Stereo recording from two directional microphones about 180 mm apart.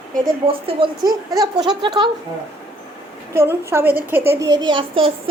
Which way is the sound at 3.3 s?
15° right (ahead or behind).